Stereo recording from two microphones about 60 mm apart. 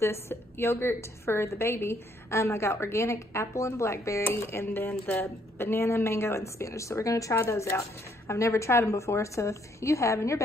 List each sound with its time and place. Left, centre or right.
0.0 s a woman's voice: left
4.2 s a woman's voice: left